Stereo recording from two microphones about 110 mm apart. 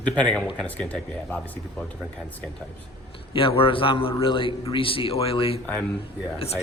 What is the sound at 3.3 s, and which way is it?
A man's voice, 55° left (ahead or behind).